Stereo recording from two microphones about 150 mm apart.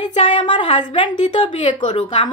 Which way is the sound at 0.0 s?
30° left (ahead or behind).